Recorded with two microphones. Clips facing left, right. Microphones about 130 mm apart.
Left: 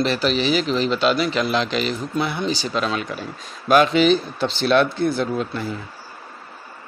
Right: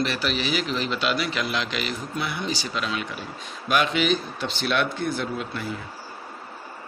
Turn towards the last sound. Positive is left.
turn(degrees=30)  # may be behind; listen again after turning